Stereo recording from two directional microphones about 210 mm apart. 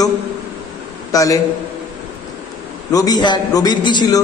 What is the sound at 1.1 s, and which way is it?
Speech, 15° left (ahead or behind).